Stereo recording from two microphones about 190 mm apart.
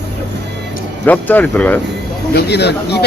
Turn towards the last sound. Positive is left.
turn(degrees=60)  # may be behind; listen again after turning